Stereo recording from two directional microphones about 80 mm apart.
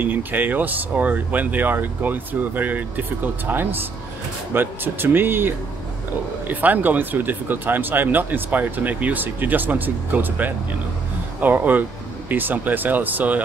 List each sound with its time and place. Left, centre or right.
0.0 s speech: right